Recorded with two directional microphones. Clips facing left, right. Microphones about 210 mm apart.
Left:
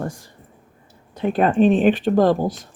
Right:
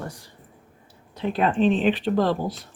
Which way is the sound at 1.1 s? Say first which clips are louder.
Left 5 dB; 50° left (ahead or behind).